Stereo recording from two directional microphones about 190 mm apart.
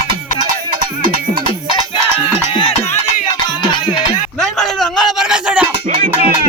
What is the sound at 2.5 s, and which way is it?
Music, 25° left (ahead or behind).